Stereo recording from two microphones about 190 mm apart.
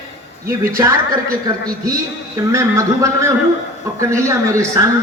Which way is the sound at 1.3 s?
50° right (ahead or behind).